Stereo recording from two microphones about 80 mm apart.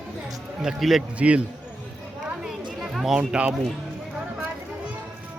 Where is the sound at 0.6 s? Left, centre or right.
Centre.